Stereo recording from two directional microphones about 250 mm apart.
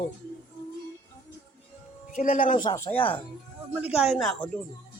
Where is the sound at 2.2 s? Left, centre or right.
Left.